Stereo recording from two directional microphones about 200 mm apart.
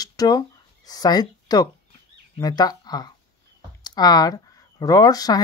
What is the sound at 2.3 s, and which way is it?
Speech, 20° left (ahead or behind).